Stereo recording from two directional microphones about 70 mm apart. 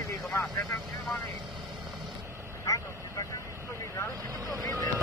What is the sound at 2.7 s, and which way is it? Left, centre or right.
Vehicle, left.